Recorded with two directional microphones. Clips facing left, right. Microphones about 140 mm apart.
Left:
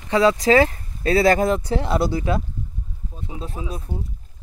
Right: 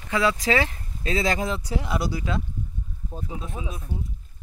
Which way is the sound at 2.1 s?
50° left (ahead or behind).